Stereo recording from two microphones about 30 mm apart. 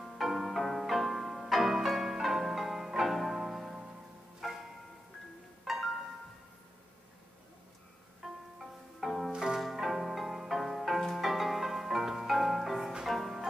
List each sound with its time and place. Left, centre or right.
0.0 s music: centre
1.6 s music: centre
5.7 s music: centre
8.2 s music: centre
9.3 s music: centre
9.6 s music: centre